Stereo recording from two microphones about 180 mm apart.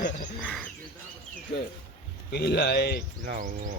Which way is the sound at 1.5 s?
70° left (ahead or behind).